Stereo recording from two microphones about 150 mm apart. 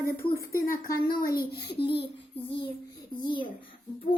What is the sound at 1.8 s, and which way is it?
Speech, 35° left (ahead or behind).